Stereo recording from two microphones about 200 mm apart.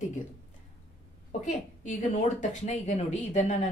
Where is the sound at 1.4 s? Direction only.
35° left (ahead or behind).